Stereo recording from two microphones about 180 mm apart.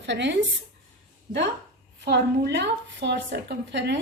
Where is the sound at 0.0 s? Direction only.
80° right.